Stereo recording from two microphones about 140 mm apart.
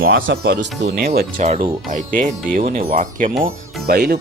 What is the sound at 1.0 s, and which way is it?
Speech, 90° right.